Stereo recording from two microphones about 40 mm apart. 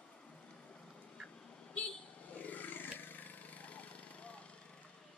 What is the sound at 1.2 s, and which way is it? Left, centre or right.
Vehicle, left.